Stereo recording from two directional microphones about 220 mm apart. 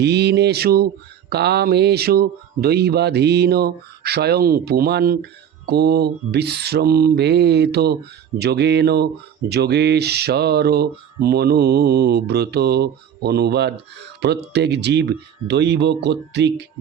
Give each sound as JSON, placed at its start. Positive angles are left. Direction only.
{"t": 0.0, "sound": "speech", "side_deg": -50}